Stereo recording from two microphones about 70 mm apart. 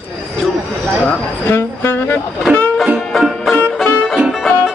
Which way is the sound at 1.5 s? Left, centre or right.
Left.